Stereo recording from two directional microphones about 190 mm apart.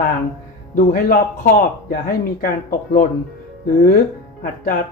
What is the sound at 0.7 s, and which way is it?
Speech, 50° left (ahead or behind).